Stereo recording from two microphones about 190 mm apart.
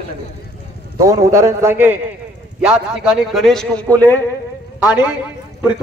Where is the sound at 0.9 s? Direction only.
15° right (ahead or behind); by 4.2 s 10° left (ahead or behind).